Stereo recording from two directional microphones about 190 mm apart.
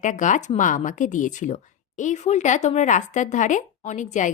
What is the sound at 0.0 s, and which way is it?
Speech, 40° left (ahead or behind).